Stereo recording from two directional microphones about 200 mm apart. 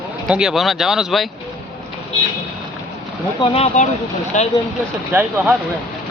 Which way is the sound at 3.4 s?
35° left (ahead or behind).